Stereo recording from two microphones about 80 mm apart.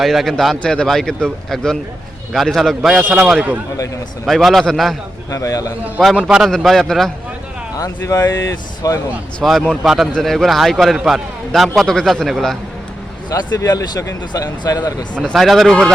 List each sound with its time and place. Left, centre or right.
0.0 s a man's voice: centre
3.0 s a man's voice: centre
4.3 s a man's voice: centre
5.3 s speech: left
6.2 s a man's voice: centre
7.8 s speech: left
9.4 s a man's voice: centre
13.3 s speech: left
15.1 s a man's voice: centre